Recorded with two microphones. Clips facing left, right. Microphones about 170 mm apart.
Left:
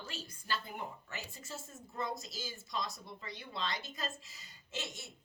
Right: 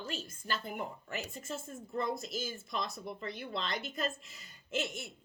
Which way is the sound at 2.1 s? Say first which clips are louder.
Right 6 dB; 55° right (ahead or behind).